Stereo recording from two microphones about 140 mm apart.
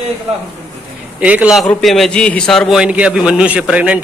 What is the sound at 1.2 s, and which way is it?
A man's voice, 10° right (ahead or behind).